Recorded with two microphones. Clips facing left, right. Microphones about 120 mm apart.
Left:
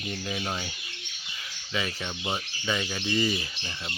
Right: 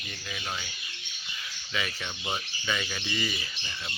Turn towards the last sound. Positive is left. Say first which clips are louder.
# left 2 dB
turn(degrees=25)  # may be behind; listen again after turning